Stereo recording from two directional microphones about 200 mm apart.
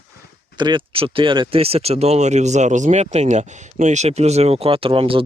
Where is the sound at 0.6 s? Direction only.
25° right (ahead or behind).